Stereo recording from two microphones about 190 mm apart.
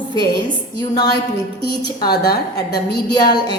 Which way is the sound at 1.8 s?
55° left (ahead or behind).